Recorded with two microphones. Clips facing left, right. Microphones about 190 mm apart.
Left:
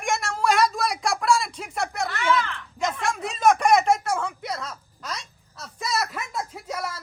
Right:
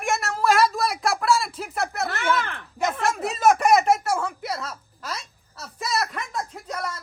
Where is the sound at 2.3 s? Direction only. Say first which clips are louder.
Left 1 dB; 55° right (ahead or behind).